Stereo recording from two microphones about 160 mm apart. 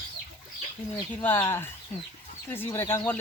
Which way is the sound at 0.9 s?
15° left (ahead or behind).